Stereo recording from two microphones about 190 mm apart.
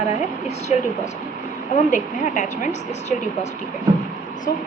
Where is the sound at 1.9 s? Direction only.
40° left (ahead or behind).